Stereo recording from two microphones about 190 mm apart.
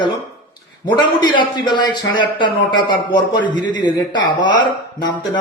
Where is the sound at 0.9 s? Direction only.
25° left (ahead or behind).